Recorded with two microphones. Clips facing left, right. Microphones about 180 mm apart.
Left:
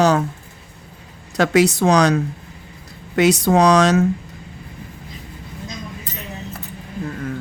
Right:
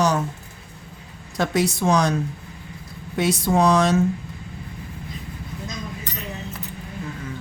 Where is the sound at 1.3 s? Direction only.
75° left (ahead or behind).